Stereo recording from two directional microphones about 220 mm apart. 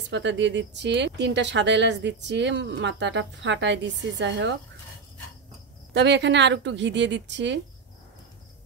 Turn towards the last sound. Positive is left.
turn(degrees=-55)  # may be behind; listen again after turning